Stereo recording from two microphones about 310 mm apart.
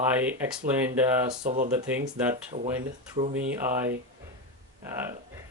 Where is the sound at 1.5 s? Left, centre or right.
Right.